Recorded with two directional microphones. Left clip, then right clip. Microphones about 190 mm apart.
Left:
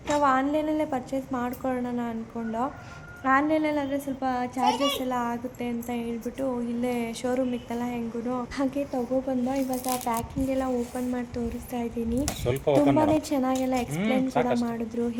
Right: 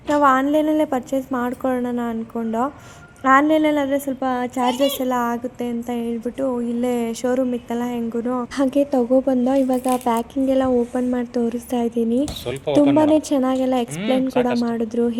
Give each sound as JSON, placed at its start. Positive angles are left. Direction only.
{"t": 0.1, "sound": "a woman's voice", "side_deg": -35}
{"t": 12.2, "sound": "speech", "side_deg": 0}
{"t": 13.0, "sound": "a woman's voice", "side_deg": -30}